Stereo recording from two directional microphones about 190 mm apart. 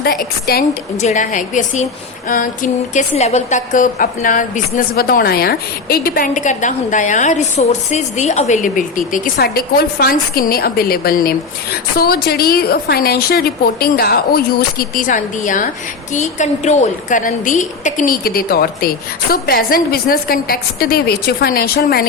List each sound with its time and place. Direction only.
0.0 s a woman's voice: 55° left (ahead or behind)
1.0 s a woman's voice: 40° left (ahead or behind)